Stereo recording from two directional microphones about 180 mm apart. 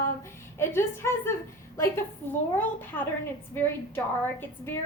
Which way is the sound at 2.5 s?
10° left (ahead or behind).